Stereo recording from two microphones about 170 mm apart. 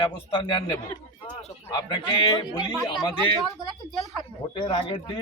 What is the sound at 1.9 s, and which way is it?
Speech, 25° left (ahead or behind).